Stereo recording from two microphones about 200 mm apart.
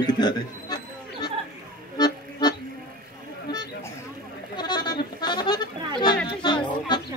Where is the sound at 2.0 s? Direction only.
20° left (ahead or behind).